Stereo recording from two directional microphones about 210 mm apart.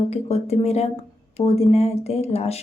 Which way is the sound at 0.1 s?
30° left (ahead or behind).